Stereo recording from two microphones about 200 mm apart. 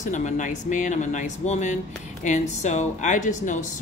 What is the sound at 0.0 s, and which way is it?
Speech, 35° left (ahead or behind).